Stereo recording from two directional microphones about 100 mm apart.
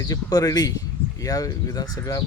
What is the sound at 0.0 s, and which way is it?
Speech, 40° left (ahead or behind).